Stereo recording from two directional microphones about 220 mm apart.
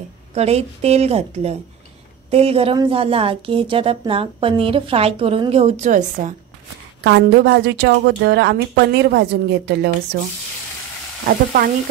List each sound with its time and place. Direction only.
0.3 s a woman's voice: 30° right (ahead or behind)
7.0 s a woman's voice: 50° right (ahead or behind)
11.2 s frying: 40° right (ahead or behind)